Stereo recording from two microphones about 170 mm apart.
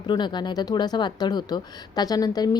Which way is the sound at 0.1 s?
25° left (ahead or behind).